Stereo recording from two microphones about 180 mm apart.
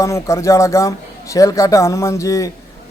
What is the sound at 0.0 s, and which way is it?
Speech, 15° left (ahead or behind).